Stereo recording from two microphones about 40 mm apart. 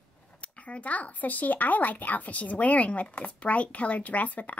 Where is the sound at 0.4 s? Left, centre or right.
Left.